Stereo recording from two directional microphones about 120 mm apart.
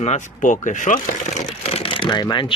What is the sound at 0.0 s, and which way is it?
Speech, 80° left.